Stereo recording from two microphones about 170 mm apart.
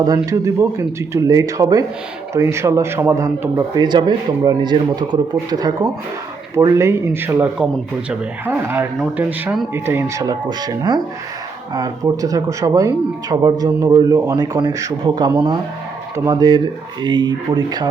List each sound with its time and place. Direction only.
0.0 s a man's voice: 20° right (ahead or behind)